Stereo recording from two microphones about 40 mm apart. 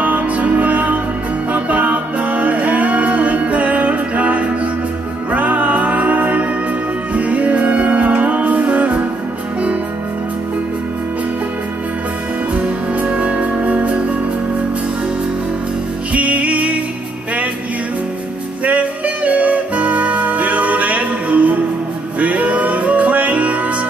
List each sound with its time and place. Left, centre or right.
0.0 s music: right
12.5 s music: right
16.1 s music: right
18.6 s music: right